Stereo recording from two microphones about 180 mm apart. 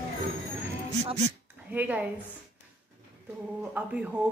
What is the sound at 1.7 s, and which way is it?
Speech, 10° right (ahead or behind).